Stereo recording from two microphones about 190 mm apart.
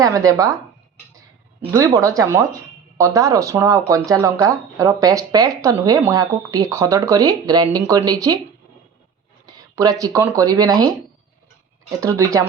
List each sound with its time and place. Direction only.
0.0 s speech: 20° right (ahead or behind)
1.7 s speech: 15° right (ahead or behind)
9.5 s speech: 20° right (ahead or behind)
11.9 s speech: 15° right (ahead or behind)